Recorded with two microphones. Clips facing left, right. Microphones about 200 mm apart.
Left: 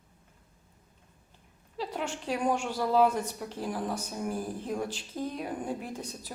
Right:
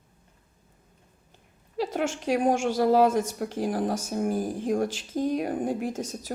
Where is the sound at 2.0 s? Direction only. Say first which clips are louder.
Right 6 dB; 90° right.